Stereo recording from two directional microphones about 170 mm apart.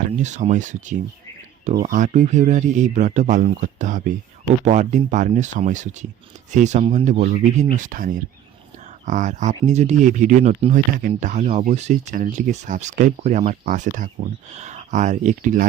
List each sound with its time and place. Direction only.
0.0 s speech: 45° right (ahead or behind)